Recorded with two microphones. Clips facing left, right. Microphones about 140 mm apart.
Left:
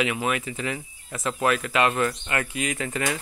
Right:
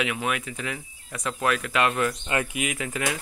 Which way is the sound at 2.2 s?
20° right (ahead or behind).